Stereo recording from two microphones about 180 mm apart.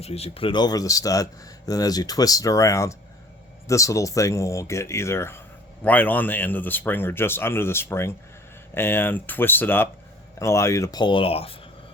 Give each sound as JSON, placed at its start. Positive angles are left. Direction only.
{"t": 0.0, "sound": "speech", "side_deg": 35}